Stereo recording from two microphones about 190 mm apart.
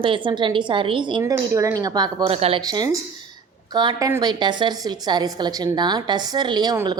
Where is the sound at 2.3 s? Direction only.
30° right (ahead or behind).